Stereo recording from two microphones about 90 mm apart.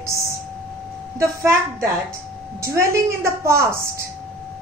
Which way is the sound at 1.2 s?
30° right (ahead or behind).